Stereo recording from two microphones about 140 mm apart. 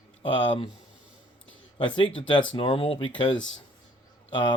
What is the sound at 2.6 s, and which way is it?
A man's voice, 40° left (ahead or behind).